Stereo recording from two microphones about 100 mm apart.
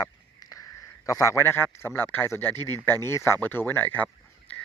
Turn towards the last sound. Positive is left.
turn(degrees=15)  # may be behind; listen again after turning